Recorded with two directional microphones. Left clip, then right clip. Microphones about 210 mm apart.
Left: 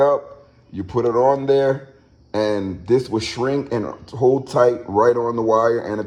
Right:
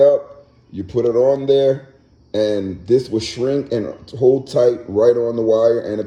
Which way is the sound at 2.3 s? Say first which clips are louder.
Right 2 dB; 30° left (ahead or behind).